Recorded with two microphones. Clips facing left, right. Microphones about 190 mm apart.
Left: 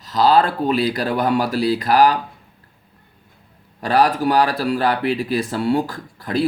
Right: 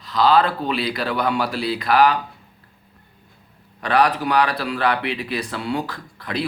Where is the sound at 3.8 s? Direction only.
40° left (ahead or behind).